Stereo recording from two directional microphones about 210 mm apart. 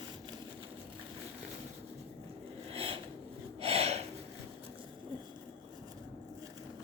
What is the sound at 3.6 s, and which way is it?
Gasp, 30° right (ahead or behind).